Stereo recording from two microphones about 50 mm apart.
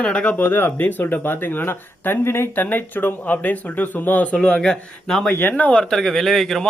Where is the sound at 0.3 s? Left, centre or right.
Left.